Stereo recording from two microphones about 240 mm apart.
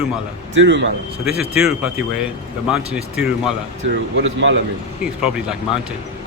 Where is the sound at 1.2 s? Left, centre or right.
Centre.